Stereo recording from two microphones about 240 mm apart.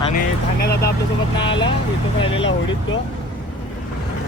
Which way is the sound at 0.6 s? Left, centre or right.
Left.